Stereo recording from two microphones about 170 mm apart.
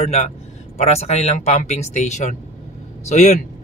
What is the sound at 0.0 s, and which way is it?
Speech, 40° left (ahead or behind).